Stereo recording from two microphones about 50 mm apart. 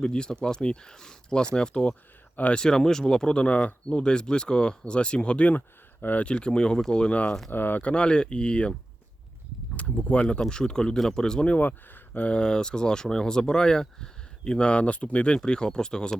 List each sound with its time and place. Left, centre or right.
0.0 s speech: centre
2.3 s speech: left
2.6 s speech: centre; by 6.2 s left
6.2 s speech: centre
7.5 s speech: left
7.8 s speech: left
9.7 s speech: left
11.4 s speech: left
12.3 s speech: centre
15.4 s speech: centre